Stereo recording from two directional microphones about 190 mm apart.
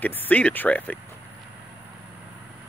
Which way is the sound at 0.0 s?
10° left (ahead or behind).